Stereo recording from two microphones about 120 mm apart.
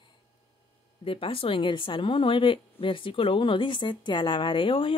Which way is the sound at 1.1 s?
50° left (ahead or behind).